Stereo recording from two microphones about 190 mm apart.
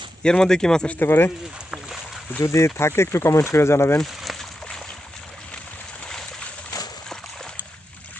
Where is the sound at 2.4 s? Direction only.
15° left (ahead or behind).